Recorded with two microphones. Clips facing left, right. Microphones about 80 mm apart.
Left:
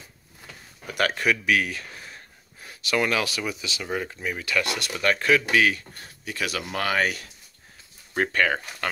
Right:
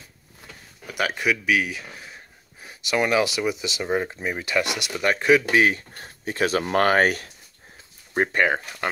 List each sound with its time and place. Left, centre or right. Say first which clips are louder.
0.8 s speech: even; centre
5.6 s speech: right 2 dB; right
8.1 s speech: right 2 dB; right